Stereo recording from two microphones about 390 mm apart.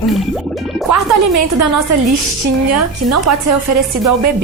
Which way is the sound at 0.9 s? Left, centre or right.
Right.